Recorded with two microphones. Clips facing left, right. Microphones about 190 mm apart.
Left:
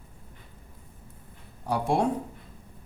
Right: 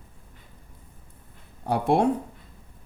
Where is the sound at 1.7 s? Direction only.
60° right (ahead or behind).